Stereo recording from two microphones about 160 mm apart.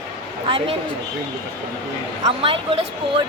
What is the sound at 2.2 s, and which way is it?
Speech, 35° right (ahead or behind).